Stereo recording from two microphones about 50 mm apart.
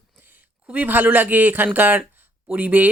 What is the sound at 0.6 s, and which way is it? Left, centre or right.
Speech, right.